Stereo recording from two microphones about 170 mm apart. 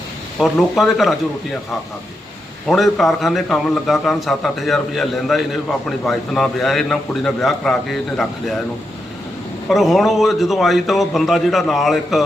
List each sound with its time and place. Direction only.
0.3 s a man's voice: centre (ahead or behind)
2.6 s a man's voice: centre (ahead or behind)
9.6 s a man's voice: centre (ahead or behind)